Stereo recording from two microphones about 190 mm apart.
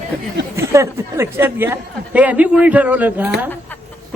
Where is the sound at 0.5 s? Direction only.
15° right (ahead or behind).